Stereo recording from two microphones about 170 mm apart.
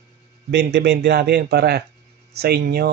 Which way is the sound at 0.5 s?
80° right.